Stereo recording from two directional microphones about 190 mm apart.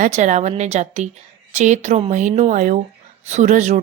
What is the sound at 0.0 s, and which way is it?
Speech, 40° right (ahead or behind).